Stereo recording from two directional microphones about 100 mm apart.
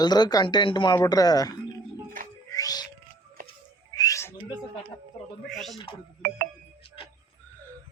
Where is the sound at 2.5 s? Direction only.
40° left (ahead or behind).